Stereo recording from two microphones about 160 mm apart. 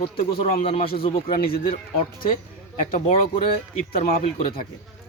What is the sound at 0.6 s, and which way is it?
Speech, 35° left (ahead or behind).